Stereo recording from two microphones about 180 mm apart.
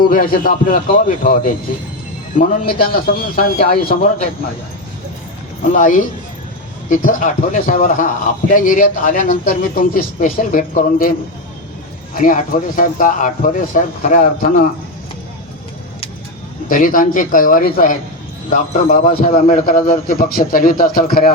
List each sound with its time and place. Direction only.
0.1 s a man's voice: 50° left (ahead or behind)
2.6 s speech: 55° left (ahead or behind)
5.7 s a man's voice: 45° left (ahead or behind)
12.1 s a man's voice: 50° left (ahead or behind)
16.6 s a man's voice: 50° left (ahead or behind)